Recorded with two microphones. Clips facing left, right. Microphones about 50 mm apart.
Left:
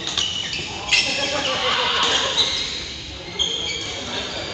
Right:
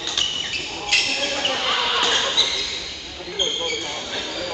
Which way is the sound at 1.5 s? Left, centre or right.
Centre.